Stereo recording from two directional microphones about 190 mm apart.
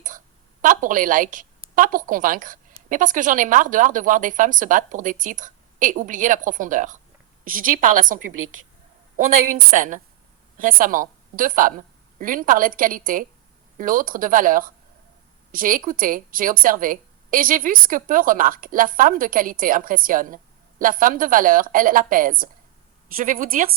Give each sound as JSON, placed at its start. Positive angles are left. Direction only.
{"t": 0.6, "sound": "a woman's voice", "side_deg": -45}
{"t": 9.6, "sound": "a woman's voice", "side_deg": -45}